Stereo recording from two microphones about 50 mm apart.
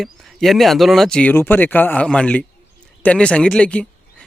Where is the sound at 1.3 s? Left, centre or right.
Left.